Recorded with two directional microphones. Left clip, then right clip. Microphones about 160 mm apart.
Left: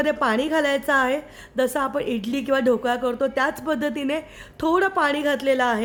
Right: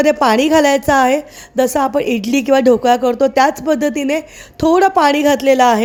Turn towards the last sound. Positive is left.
turn(degrees=-40)  # may be behind; listen again after turning